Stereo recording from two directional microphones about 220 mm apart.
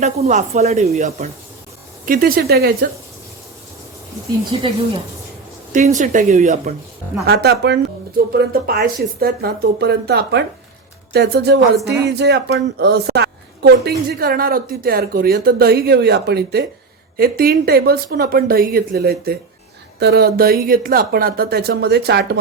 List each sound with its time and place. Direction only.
0.0 s speech: 30° right (ahead or behind)
2.0 s speech: 40° right (ahead or behind)
4.5 s speech: 25° right (ahead or behind)
5.7 s speech: 35° right (ahead or behind)
7.3 s a woman's voice: 50° right (ahead or behind)